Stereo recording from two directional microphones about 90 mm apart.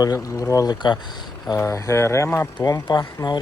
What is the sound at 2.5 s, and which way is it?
Speech, 50° left (ahead or behind).